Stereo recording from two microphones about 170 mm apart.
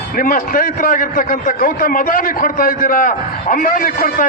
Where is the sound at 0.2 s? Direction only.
55° left (ahead or behind).